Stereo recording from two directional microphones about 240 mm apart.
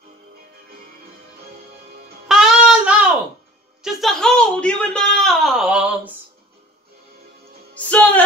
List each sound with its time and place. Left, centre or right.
2.2 s child singing: centre
3.8 s speech: centre
7.7 s music: centre